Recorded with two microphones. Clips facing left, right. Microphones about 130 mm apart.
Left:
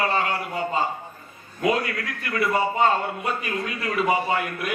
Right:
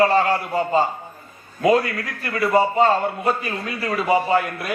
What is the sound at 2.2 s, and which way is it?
Speech, 35° right (ahead or behind).